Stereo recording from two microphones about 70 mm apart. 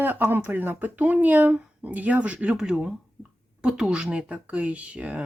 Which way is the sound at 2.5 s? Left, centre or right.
Centre.